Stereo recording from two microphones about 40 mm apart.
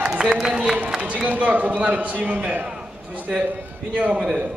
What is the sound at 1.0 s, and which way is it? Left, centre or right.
Speech, right.